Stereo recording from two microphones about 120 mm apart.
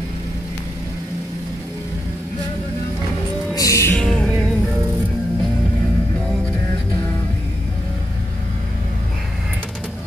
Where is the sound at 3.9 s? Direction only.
5° left (ahead or behind).